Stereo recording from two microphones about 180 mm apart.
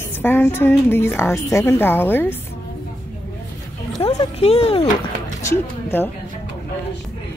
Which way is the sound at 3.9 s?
35° left (ahead or behind).